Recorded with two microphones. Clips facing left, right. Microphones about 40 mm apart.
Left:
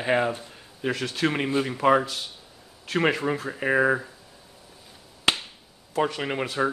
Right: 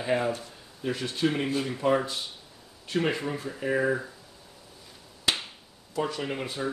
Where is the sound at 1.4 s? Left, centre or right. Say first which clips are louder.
Left 4 dB; left.